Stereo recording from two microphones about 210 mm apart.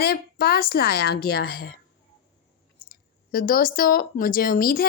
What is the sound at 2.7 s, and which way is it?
Speech, 45° left (ahead or behind).